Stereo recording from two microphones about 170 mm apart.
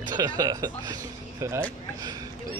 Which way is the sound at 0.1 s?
20° right (ahead or behind).